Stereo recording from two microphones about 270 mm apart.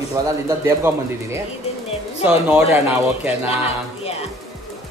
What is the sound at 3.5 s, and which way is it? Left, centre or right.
Speech, left.